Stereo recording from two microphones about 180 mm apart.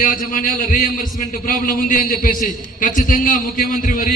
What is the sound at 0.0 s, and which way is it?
A man's voice, 50° left (ahead or behind).